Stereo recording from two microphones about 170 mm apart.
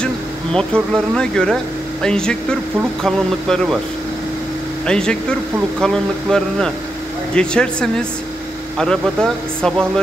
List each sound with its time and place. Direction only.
0.0 s speech: 5° left (ahead or behind)
4.8 s speech: 5° left (ahead or behind)